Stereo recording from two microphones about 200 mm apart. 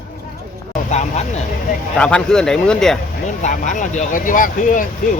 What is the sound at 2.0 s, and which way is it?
Speech, 5° left (ahead or behind).